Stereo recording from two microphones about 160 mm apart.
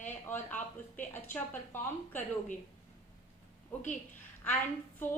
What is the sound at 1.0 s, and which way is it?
A woman's voice, 15° left (ahead or behind).